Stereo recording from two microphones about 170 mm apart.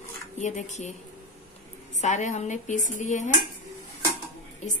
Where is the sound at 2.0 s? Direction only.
45° left (ahead or behind).